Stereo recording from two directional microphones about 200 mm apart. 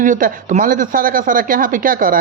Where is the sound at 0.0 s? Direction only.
40° right (ahead or behind).